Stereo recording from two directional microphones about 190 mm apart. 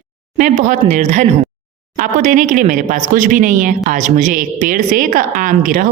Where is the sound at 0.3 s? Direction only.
40° right (ahead or behind).